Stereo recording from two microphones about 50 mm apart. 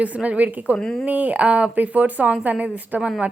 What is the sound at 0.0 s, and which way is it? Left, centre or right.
A woman's voice, right.